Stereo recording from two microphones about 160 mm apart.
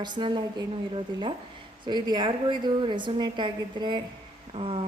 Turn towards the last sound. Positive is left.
turn(degrees=-35)  # may be behind; listen again after turning